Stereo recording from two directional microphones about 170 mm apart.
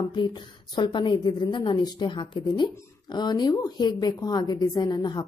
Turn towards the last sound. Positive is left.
turn(degrees=25)  # may be behind; listen again after turning